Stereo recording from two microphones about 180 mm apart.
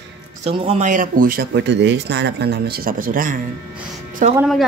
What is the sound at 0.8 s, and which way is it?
Speech, 45° right (ahead or behind).